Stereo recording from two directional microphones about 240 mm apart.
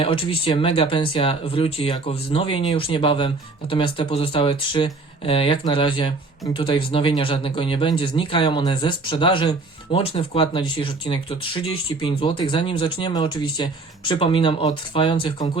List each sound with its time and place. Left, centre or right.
0.0 s speech: left